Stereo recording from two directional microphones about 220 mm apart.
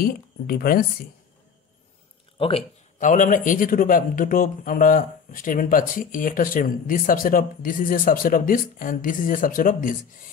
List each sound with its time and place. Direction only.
0.0 s speech: 40° left (ahead or behind)
2.3 s a sound: 25° left (ahead or behind)
3.1 s a man's voice: 40° left (ahead or behind)